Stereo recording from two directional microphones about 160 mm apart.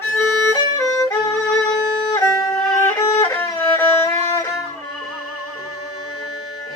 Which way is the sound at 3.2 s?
15° left (ahead or behind).